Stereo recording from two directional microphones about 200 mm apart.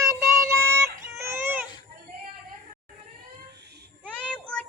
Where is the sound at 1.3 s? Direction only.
10° right (ahead or behind).